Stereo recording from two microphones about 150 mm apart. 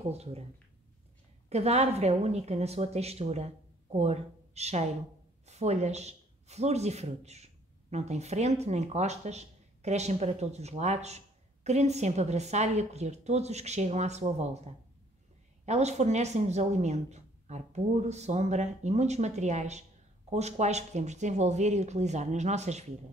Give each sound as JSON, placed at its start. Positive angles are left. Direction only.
{"t": 0.0, "sound": "speech", "side_deg": -45}
{"t": 1.5, "sound": "speech", "side_deg": -45}
{"t": 15.6, "sound": "speech", "side_deg": -50}